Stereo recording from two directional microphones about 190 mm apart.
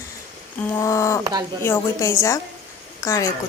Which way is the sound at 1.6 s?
15° left (ahead or behind).